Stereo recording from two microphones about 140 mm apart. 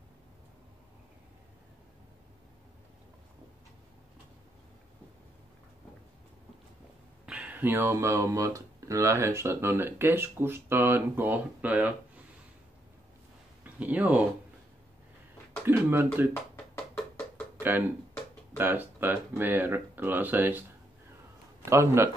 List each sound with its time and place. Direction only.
7.2 s speech: 10° right (ahead or behind)
13.7 s speech: 10° right (ahead or behind)
15.6 s speech: 15° right (ahead or behind)
17.6 s a sound: 15° right (ahead or behind)
18.6 s speech: 15° right (ahead or behind)
21.6 s speech: 20° right (ahead or behind)